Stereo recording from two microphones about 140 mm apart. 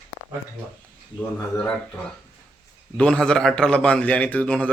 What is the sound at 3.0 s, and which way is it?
A man's voice, 5° left (ahead or behind).